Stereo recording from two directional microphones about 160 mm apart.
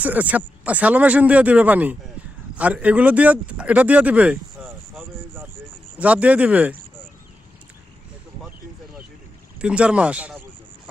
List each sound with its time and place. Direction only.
0.0 s speech: 10° right (ahead or behind)
5.0 s vehicle: 15° right (ahead or behind)
6.0 s speech: 10° right (ahead or behind)
9.6 s speech: 5° right (ahead or behind)